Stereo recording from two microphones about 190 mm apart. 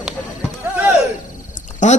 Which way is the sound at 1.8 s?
40° left (ahead or behind).